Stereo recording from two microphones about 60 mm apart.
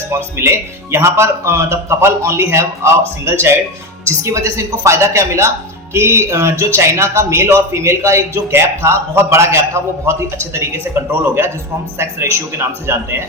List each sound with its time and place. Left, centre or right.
0.1 s speech: right